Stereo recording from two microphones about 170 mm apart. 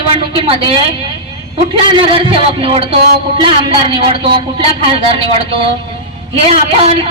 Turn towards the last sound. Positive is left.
turn(degrees=-35)  # may be behind; listen again after turning